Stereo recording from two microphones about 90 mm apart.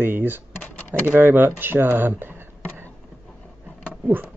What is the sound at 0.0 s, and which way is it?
Speech, 25° right (ahead or behind).